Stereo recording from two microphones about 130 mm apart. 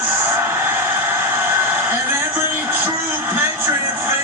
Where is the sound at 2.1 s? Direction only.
15° right (ahead or behind).